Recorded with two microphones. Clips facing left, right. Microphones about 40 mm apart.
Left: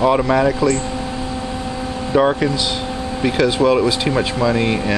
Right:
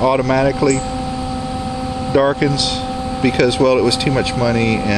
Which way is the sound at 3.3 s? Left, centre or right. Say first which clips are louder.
Right 2 dB; centre.